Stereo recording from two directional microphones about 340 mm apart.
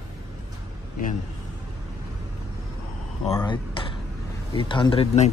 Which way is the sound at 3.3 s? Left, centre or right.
Centre.